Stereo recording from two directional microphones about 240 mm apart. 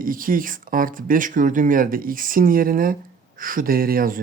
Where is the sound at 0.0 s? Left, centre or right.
Right.